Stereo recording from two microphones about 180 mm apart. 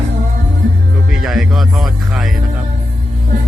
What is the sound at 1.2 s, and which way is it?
Music, centre (ahead or behind).